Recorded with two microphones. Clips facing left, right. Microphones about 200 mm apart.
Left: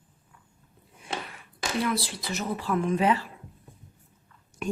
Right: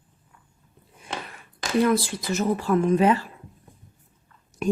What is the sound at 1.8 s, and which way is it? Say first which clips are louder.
Speech: right 8 dB; 45° right (ahead or behind).